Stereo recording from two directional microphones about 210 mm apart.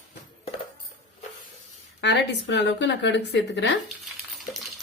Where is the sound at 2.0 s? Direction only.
55° left (ahead or behind).